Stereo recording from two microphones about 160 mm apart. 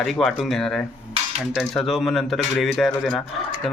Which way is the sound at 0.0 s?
Centre (ahead or behind).